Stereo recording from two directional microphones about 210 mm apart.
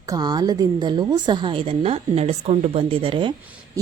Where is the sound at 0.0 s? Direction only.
20° right (ahead or behind).